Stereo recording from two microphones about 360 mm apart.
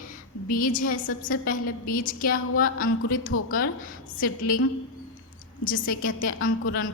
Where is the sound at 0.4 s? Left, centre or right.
Left.